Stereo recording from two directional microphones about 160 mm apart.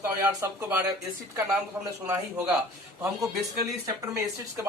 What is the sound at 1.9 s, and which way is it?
A man's voice, 15° right (ahead or behind).